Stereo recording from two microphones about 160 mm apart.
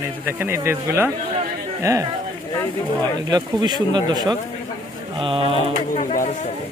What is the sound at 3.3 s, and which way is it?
A man's voice, 25° right (ahead or behind).